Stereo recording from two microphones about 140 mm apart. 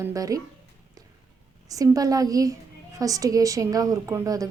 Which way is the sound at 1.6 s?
25° right (ahead or behind).